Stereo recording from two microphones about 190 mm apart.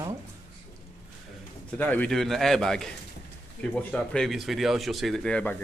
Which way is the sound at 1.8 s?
10° left (ahead or behind).